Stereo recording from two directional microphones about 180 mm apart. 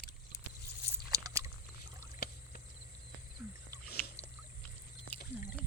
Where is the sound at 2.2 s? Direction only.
60° left (ahead or behind).